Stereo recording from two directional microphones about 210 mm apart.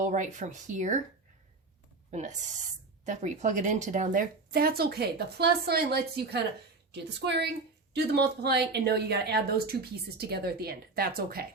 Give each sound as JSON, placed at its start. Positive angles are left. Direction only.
{"t": 0.0, "sound": "speech", "side_deg": -35}
{"t": 2.0, "sound": "a woman's voice", "side_deg": -35}